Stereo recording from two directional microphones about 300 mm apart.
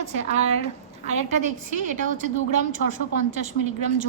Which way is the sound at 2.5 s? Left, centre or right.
Right.